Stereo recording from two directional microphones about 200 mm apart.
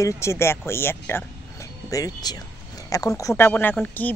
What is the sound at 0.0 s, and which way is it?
Speech, 15° left (ahead or behind).